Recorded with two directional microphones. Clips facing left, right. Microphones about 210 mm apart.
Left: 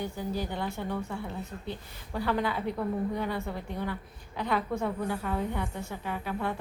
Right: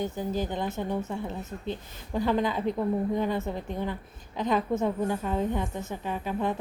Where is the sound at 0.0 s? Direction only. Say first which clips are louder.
Right 3 dB; 20° right (ahead or behind).